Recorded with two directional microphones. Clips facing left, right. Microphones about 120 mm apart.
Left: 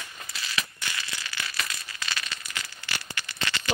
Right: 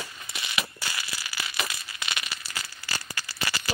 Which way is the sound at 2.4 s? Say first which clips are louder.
Even; 35° right (ahead or behind).